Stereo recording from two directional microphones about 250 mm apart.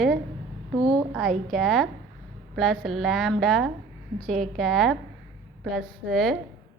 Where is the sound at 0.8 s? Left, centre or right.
Centre.